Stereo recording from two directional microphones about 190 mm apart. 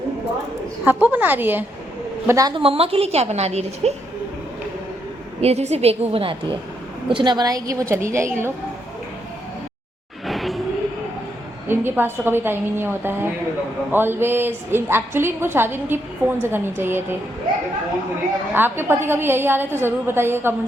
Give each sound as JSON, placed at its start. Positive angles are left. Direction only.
{"t": 0.9, "sound": "a woman's voice", "side_deg": -10}
{"t": 5.4, "sound": "a woman's voice", "side_deg": -35}
{"t": 10.2, "sound": "a sound", "side_deg": 0}
{"t": 11.7, "sound": "a woman's voice", "side_deg": -10}
{"t": 18.5, "sound": "a woman's voice", "side_deg": -10}